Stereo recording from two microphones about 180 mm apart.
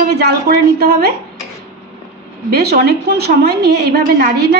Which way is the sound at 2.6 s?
60° right (ahead or behind).